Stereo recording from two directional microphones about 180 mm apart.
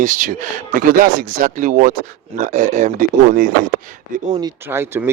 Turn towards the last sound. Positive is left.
turn(degrees=-15)  # may be behind; listen again after turning